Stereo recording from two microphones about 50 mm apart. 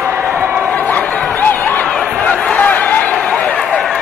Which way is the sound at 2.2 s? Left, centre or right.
Left.